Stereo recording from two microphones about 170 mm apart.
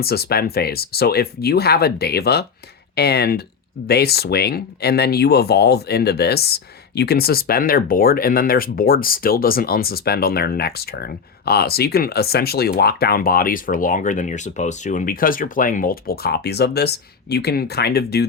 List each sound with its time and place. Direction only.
0.0 s speech: 70° left (ahead or behind)